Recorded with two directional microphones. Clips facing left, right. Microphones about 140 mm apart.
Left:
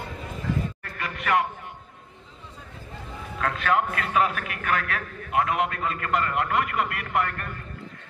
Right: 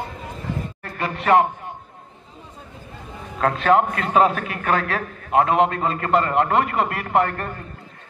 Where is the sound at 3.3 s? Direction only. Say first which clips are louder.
Right 7 dB; 35° right (ahead or behind).